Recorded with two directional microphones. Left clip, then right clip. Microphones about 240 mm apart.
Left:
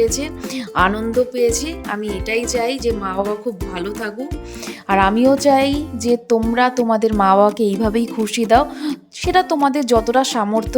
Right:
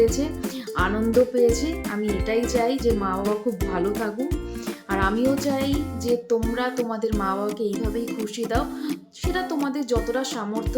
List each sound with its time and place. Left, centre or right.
0.0 s speech: left